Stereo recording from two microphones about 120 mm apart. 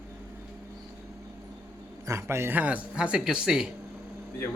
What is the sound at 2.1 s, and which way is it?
Speech, 25° right (ahead or behind).